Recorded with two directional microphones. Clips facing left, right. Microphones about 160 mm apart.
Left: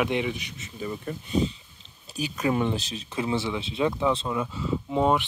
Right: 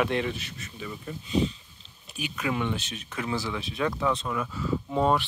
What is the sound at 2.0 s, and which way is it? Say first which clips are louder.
Speech: left 4 dB; 35° left (ahead or behind).